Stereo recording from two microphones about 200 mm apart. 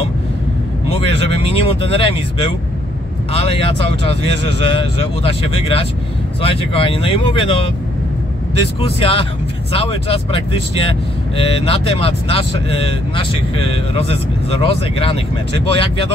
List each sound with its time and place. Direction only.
1.1 s speech: 60° right (ahead or behind)
1.5 s speech: 30° left (ahead or behind)
4.6 s speech: 25° left (ahead or behind)
8.8 s speech: 25° left (ahead or behind)